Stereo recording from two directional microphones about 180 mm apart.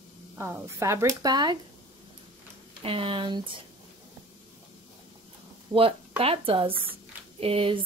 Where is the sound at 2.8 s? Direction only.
30° right (ahead or behind).